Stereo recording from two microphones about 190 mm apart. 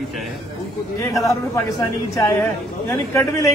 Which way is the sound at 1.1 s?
15° left (ahead or behind).